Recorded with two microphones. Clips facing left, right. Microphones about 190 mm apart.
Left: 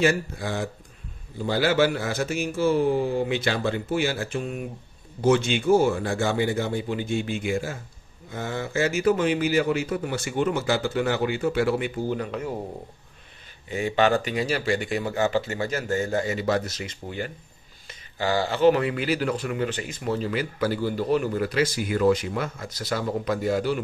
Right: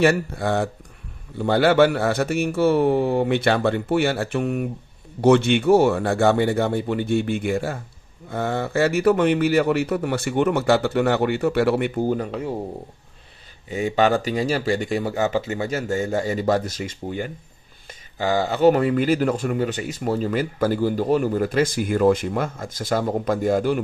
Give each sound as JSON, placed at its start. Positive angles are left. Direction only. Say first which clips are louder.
{"t": 0.0, "sound": "a man's voice", "louder": "right 4 dB", "side_deg": -60}
{"t": 13.7, "sound": "speech", "louder": "right 2 dB", "side_deg": -40}
{"t": 15.4, "sound": "a man's voice", "louder": "right 3 dB", "side_deg": -20}
{"t": 16.3, "sound": "speech", "louder": "right 4 dB", "side_deg": -40}
{"t": 18.4, "sound": "speech", "louder": "right 3 dB", "side_deg": -45}